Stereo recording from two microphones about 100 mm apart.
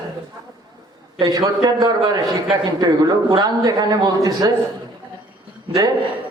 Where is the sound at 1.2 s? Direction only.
35° right (ahead or behind).